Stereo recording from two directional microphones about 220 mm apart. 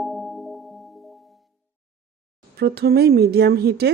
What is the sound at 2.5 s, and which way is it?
Speech, 45° right (ahead or behind).